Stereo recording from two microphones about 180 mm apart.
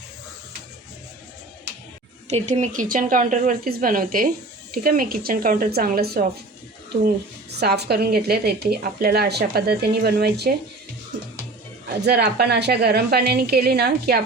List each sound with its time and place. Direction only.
2.3 s speech: 40° right (ahead or behind); by 6.2 s 55° right (ahead or behind)
7.6 s a woman's voice: 65° right (ahead or behind)
12.0 s a woman's voice: 65° right (ahead or behind)